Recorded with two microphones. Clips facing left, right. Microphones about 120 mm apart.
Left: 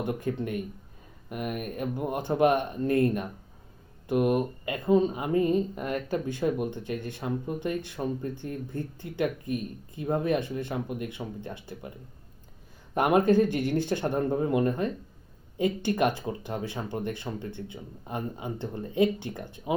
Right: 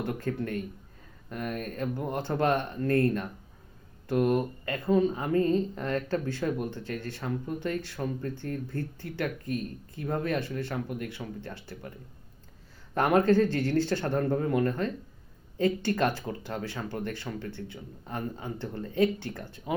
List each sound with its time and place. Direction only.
0.0 s speech: 15° left (ahead or behind)